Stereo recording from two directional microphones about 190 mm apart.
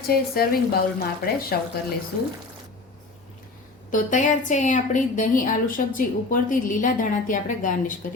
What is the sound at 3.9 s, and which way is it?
A woman's voice, 40° left (ahead or behind).